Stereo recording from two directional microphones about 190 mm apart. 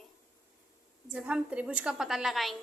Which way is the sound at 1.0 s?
5° right (ahead or behind).